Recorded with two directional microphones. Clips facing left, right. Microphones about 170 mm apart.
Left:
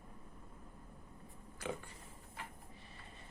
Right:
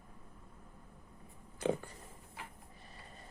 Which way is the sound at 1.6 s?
25° right (ahead or behind).